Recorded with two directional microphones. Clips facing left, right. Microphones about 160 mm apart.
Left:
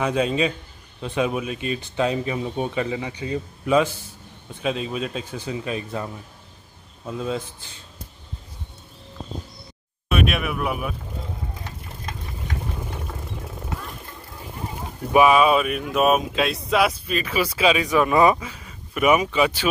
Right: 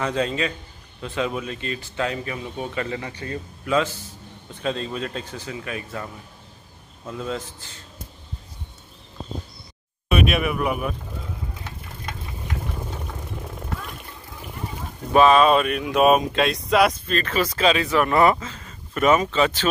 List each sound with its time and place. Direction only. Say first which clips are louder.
0.0 s speech: left 3 dB; 15° left (ahead or behind)
7.1 s speech: left 2 dB; 15° left (ahead or behind)
10.0 s speech: right 2 dB; centre (ahead or behind)
15.1 s speech: right 1 dB; 10° left (ahead or behind)